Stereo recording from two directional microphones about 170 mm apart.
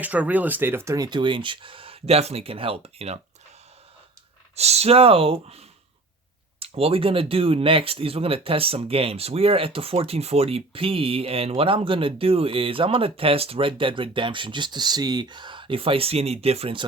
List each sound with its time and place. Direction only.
0.0 s speech: 10° right (ahead or behind); by 3.2 s 35° right (ahead or behind)
4.5 s speech: 40° right (ahead or behind)